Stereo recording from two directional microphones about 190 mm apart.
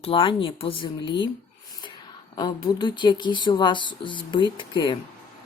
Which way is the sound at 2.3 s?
20° left (ahead or behind).